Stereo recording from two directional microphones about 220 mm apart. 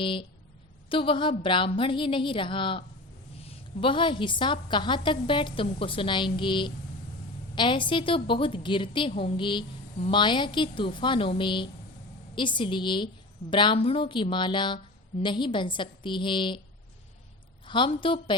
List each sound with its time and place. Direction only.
0.0 s a woman's voice: 25° left (ahead or behind)
17.7 s a woman's voice: 20° left (ahead or behind)